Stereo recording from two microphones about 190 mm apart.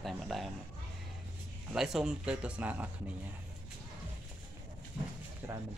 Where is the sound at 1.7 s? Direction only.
Centre (ahead or behind).